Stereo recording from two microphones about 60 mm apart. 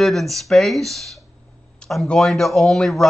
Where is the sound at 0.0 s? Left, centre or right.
Centre.